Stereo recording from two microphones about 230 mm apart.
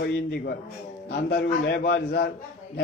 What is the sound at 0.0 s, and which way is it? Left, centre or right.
A man's voice, left.